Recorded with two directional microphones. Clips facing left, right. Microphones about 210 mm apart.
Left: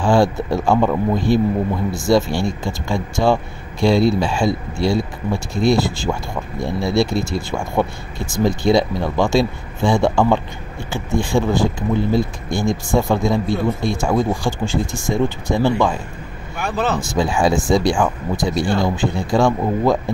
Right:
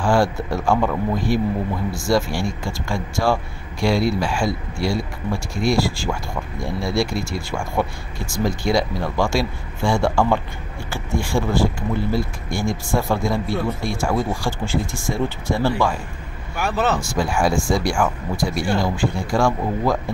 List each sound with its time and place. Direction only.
0.0 s speech: 20° left (ahead or behind)
16.5 s speech: 5° right (ahead or behind)
17.1 s speech: 20° left (ahead or behind)